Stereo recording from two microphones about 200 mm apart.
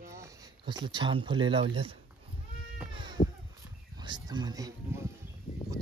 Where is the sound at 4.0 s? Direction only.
20° right (ahead or behind).